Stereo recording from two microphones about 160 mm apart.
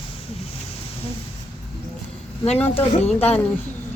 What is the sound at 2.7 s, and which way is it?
Speech, 40° left (ahead or behind).